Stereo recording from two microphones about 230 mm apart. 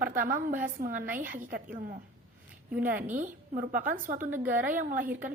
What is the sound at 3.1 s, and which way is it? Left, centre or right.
A woman's voice, right.